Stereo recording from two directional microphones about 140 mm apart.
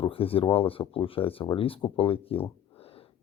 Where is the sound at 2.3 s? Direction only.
40° left (ahead or behind).